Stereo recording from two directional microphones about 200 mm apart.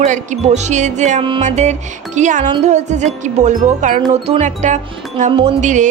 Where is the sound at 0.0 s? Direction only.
35° right (ahead or behind).